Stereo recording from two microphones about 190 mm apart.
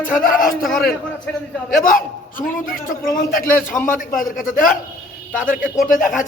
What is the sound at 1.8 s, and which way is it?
A man's voice, 45° left (ahead or behind).